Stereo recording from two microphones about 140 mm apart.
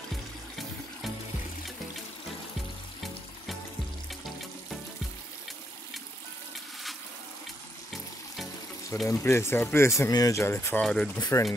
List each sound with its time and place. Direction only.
9.0 s speech: 20° left (ahead or behind)
10.8 s speech: 5° left (ahead or behind)
11.1 s speech: 25° left (ahead or behind)